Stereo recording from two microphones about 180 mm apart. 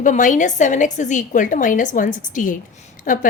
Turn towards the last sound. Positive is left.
turn(degrees=45)  # may be behind; listen again after turning